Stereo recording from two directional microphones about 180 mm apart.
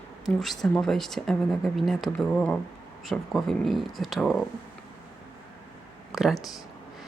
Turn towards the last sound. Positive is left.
turn(degrees=0)  # may be behind; listen again after turning